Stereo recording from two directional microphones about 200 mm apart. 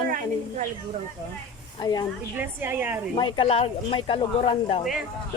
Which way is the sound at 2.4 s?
10° right (ahead or behind).